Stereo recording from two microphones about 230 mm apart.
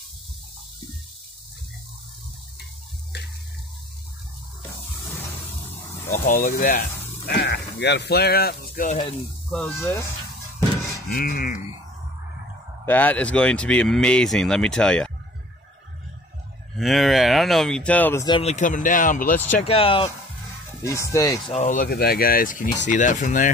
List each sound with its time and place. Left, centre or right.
6.1 s speech: left
9.5 s speech: centre
11.1 s speech: left
12.8 s speech: centre
16.7 s speech: centre
18.2 s speech: left
20.8 s speech: centre
21.5 s speech: left